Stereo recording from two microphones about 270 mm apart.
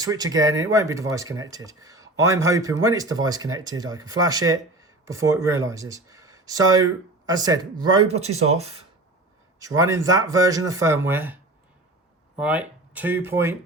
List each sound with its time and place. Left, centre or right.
0.0 s speech: centre
9.6 s speech: centre
12.4 s speech: centre